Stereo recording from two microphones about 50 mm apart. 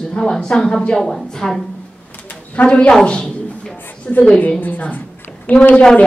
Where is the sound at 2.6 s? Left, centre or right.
Left.